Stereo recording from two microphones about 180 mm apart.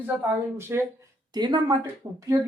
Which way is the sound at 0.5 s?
15° right (ahead or behind).